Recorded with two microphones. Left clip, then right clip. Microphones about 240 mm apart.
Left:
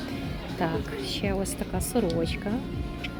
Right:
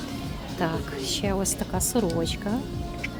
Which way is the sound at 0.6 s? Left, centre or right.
Centre.